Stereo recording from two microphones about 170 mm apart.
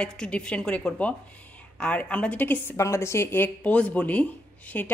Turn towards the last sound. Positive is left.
turn(degrees=10)  # may be behind; listen again after turning